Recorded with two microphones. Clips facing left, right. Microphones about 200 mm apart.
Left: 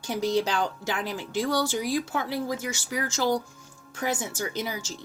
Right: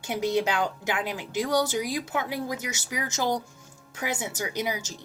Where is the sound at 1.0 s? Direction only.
20° right (ahead or behind).